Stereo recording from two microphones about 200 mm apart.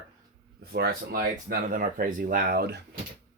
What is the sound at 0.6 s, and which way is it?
Speech, 50° right (ahead or behind).